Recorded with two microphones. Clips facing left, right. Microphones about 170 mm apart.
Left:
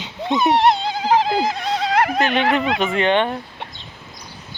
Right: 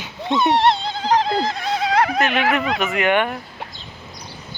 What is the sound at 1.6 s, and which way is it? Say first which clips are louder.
Music: even; 5° right (ahead or behind).